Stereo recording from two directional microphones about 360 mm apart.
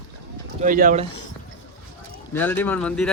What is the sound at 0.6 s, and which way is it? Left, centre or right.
Speech, right.